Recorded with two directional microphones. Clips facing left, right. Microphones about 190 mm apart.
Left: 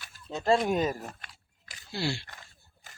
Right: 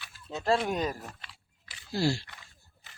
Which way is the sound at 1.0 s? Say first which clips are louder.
Left 3 dB; 45° left (ahead or behind).